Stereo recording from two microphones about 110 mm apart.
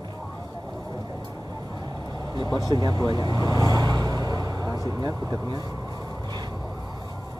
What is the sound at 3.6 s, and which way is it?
Vehicle, 35° right (ahead or behind).